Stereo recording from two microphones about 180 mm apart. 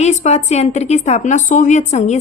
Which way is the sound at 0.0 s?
40° left (ahead or behind).